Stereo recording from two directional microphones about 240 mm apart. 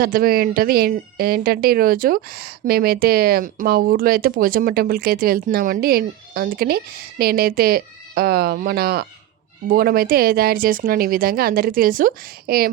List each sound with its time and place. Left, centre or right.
0.0 s speech: right